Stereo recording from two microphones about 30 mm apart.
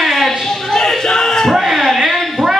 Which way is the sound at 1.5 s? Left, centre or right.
Centre.